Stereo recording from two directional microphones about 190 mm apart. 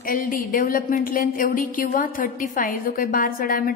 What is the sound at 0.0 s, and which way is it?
A woman's voice, 45° left (ahead or behind).